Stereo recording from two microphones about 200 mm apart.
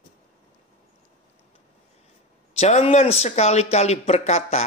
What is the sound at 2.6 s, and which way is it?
Speech, 35° left (ahead or behind).